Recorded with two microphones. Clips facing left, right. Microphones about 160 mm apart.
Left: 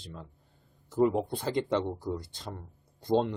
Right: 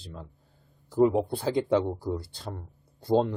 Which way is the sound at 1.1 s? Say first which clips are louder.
Right 4 dB; 5° right (ahead or behind).